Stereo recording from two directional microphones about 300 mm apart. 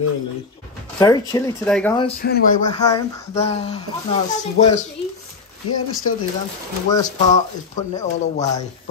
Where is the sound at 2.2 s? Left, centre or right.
Left.